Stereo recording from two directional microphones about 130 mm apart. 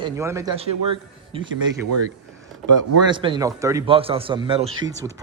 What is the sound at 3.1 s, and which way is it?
Speech, 40° right (ahead or behind).